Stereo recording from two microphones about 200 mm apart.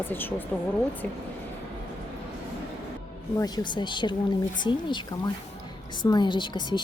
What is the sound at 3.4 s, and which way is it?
A woman's voice, 20° left (ahead or behind).